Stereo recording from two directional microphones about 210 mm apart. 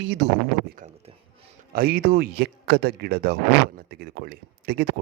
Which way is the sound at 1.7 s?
45° right (ahead or behind).